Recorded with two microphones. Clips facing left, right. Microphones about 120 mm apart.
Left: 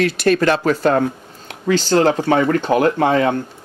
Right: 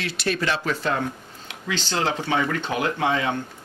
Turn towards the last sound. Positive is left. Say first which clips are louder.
# left 8 dB
turn(degrees=45)  # may be behind; listen again after turning